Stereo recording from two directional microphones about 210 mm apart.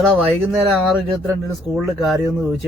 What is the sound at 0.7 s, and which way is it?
Speech, centre (ahead or behind).